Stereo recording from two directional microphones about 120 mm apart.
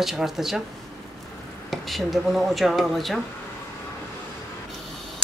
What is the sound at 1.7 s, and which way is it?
Speech, centre (ahead or behind).